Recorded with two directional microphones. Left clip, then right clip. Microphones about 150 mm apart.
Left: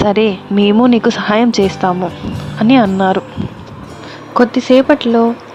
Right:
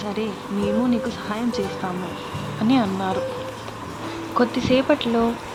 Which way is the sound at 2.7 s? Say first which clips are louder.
Left 11 dB; 65° left (ahead or behind).